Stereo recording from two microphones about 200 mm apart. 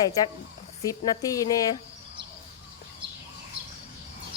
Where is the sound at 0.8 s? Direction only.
15° left (ahead or behind).